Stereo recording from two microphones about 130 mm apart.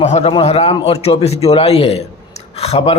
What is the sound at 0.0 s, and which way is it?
A man's voice, 55° left (ahead or behind).